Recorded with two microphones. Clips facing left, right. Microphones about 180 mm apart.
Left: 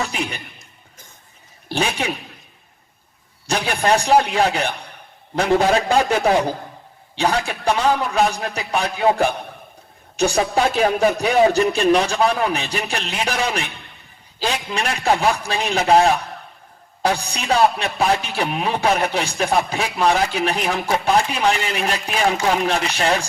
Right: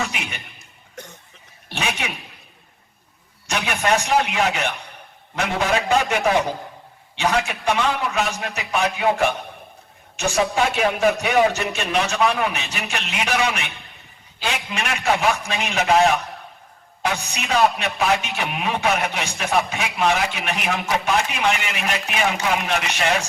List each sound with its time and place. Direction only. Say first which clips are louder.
0.0 s a man's voice: left 3 dB; 35° left (ahead or behind)
1.0 s cough: right 13 dB; 70° right (ahead or behind)
1.7 s a man's voice: left 5 dB; 35° left (ahead or behind)
3.4 s a man's voice: left 3 dB; 35° left (ahead or behind)